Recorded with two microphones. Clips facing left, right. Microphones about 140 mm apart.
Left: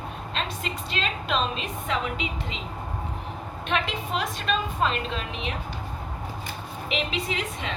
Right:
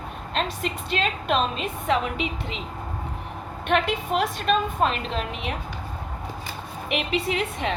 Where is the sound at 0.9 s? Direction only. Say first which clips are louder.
Right 4 dB; 50° right (ahead or behind).